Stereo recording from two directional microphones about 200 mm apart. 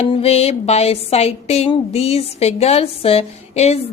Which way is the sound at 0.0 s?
30° left (ahead or behind).